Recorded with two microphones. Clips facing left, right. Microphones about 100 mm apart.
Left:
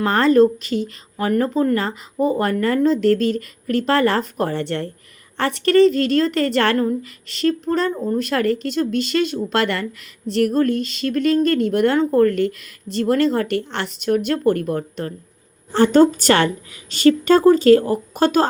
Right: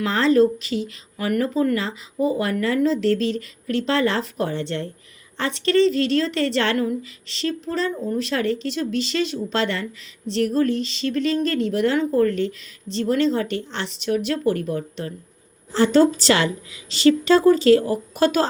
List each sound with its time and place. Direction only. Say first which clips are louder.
0.0 s speech: left 3 dB; 50° left (ahead or behind)
1.3 s speech: left 2 dB; 30° left (ahead or behind)
1.8 s speech: left 3 dB; 50° left (ahead or behind)